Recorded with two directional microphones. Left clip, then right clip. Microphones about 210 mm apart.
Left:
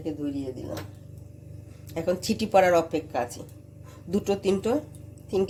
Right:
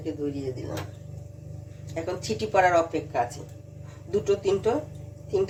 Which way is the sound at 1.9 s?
50° left (ahead or behind).